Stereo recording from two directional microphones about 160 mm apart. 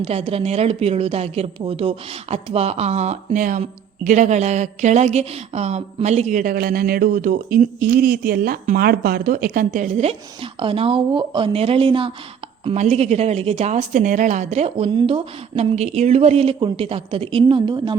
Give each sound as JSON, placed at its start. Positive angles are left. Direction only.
{"t": 0.0, "sound": "a woman's voice", "side_deg": -40}